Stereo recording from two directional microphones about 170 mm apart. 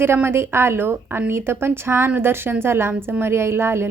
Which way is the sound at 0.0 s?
15° right (ahead or behind).